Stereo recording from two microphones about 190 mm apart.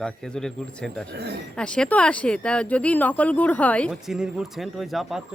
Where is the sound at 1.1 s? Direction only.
60° right (ahead or behind).